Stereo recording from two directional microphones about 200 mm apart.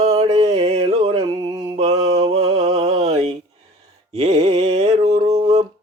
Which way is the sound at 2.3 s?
30° right (ahead or behind).